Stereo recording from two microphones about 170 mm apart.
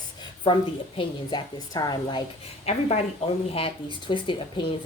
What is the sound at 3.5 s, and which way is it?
A woman's voice, 30° left (ahead or behind).